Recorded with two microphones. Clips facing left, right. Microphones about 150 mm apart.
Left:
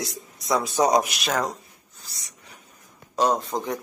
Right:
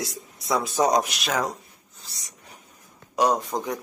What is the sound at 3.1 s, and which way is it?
Speech, 10° right (ahead or behind).